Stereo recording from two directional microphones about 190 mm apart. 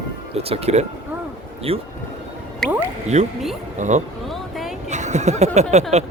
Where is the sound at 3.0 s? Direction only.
35° right (ahead or behind).